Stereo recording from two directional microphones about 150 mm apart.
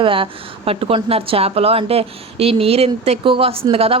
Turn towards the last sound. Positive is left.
turn(degrees=-40)  # may be behind; listen again after turning